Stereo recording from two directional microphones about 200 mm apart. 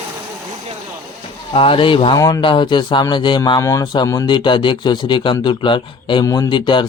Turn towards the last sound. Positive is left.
turn(degrees=25)  # may be behind; listen again after turning